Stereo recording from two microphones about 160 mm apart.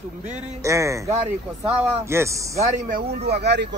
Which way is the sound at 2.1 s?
20° right (ahead or behind).